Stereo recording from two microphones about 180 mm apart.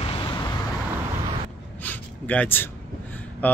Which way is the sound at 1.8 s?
10° left (ahead or behind).